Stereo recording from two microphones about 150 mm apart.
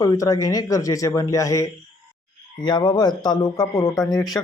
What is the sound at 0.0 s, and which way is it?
Speech, 25° left (ahead or behind).